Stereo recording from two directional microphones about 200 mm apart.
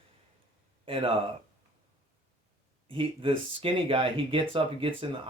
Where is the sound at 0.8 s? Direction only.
25° right (ahead or behind).